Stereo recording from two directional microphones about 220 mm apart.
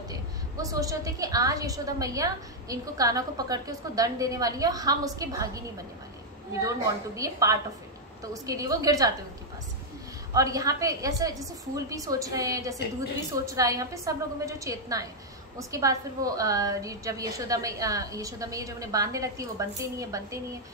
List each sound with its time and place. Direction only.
0.1 s a woman's voice: 15° right (ahead or behind)
7.2 s a woman's voice: 15° right (ahead or behind)
10.3 s a woman's voice: 15° right (ahead or behind)